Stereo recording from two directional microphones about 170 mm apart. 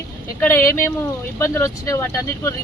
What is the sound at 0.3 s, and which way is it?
Speech, 15° left (ahead or behind).